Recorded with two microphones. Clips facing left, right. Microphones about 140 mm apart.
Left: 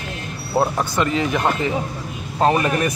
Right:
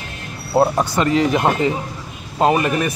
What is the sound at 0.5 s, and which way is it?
Speech, 15° right (ahead or behind).